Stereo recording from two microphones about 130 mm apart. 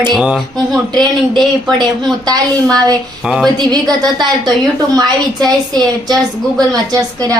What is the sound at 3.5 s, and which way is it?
A woman's voice, 30° right (ahead or behind).